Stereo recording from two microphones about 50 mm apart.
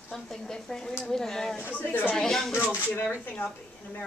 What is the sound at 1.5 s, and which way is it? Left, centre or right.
Speech, left.